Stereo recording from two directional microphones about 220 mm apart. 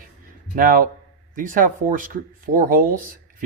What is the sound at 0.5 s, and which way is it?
Speech, 40° right (ahead or behind).